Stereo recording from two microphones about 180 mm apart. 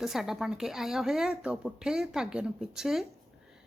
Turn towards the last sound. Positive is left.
turn(degrees=-5)  # may be behind; listen again after turning